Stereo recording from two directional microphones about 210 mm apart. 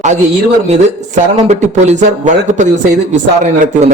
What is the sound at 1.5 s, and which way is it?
A man's voice, 35° right (ahead or behind).